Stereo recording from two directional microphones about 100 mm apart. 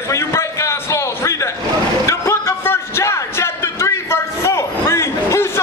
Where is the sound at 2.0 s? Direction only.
30° left (ahead or behind).